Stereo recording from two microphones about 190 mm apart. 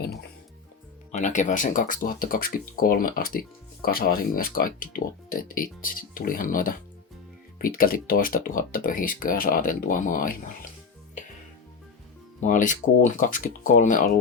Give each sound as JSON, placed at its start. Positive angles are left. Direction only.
{"t": 1.1, "sound": "speech", "side_deg": 40}
{"t": 12.4, "sound": "speech", "side_deg": 45}